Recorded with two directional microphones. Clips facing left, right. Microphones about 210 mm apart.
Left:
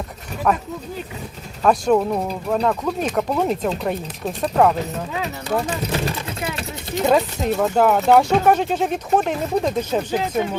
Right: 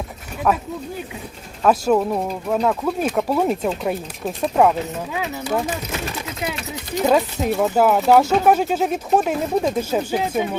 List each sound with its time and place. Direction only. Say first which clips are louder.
0.5 s speech: even; 5° right (ahead or behind)
1.6 s speech: even; 5° right (ahead or behind)
7.0 s speech: even; centre (ahead or behind)